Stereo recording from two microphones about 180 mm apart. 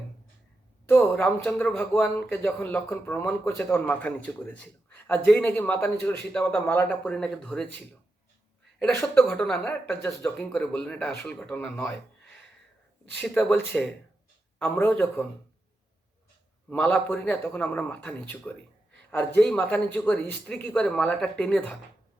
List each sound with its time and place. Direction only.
0.9 s speech: 10° left (ahead or behind)
8.8 s speech: 15° left (ahead or behind)
13.2 s speech: 5° left (ahead or behind)
16.6 s speech: 10° left (ahead or behind)